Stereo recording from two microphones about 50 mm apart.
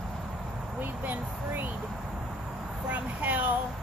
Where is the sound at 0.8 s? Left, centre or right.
Right.